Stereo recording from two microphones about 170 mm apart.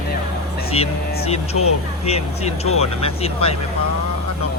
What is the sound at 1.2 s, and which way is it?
Speech, 40° left (ahead or behind).